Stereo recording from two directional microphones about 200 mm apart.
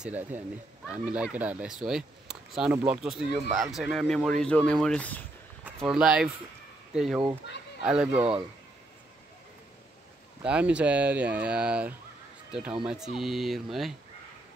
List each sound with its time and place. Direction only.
0.0 s speech: 10° right (ahead or behind); by 5.2 s 5° left (ahead or behind)
5.6 s speech: 5° right (ahead or behind)
8.2 s speech: 30° right (ahead or behind)
10.4 s speech: 5° right (ahead or behind)